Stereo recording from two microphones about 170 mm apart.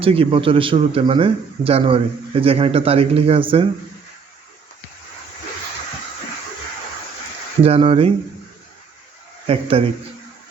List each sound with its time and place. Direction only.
0.0 s speech: 35° right (ahead or behind)
7.6 s speech: 35° right (ahead or behind)
9.5 s speech: 35° right (ahead or behind)